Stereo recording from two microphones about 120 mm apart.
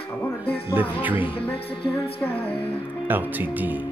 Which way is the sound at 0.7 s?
15° right (ahead or behind).